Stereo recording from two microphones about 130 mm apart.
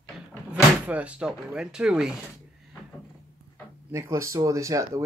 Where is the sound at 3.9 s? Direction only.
25° right (ahead or behind).